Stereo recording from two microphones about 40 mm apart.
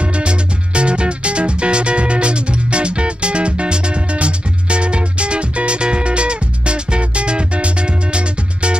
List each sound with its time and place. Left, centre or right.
0.0 s music: right